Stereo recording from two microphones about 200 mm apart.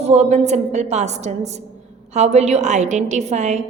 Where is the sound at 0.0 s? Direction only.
35° right (ahead or behind).